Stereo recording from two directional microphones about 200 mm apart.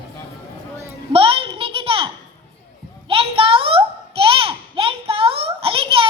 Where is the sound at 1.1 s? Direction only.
25° right (ahead or behind).